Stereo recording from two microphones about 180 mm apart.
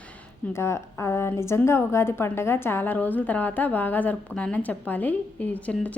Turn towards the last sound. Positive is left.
turn(degrees=10)  # may be behind; listen again after turning